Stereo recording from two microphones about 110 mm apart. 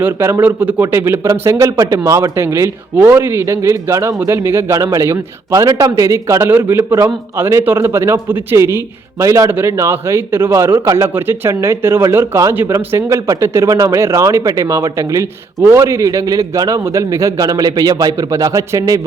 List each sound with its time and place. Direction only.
0.0 s speech: 25° right (ahead or behind)